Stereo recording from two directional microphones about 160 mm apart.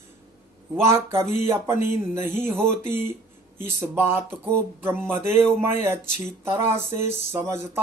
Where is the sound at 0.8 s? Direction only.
15° right (ahead or behind).